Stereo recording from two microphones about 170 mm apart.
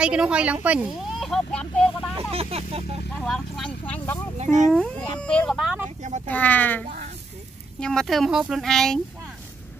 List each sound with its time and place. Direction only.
0.0 s speech: 5° right (ahead or behind)
2.3 s speech: 35° right (ahead or behind)
3.2 s speech: centre (ahead or behind)
4.4 s speech: 45° right (ahead or behind)
4.7 s speech: 5° left (ahead or behind)
6.2 s speech: 10° left (ahead or behind)
7.8 s speech: 5° left (ahead or behind)